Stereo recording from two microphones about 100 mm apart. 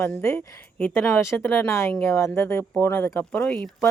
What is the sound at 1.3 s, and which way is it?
Speech, 20° left (ahead or behind).